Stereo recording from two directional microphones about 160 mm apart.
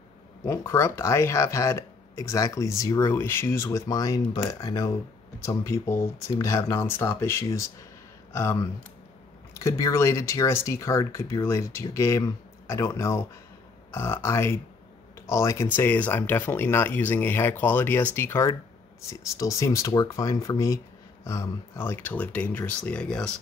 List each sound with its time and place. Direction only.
0.5 s speech: 20° left (ahead or behind)